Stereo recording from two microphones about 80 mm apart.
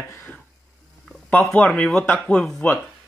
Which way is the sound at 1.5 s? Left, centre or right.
Centre.